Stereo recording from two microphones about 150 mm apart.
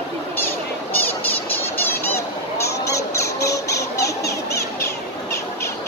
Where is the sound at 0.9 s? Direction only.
10° left (ahead or behind).